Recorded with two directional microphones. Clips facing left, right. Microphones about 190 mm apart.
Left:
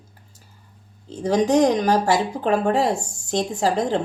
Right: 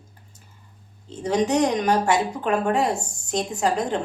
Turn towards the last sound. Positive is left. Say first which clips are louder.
# left 2 dB
turn(degrees=30)  # may be behind; listen again after turning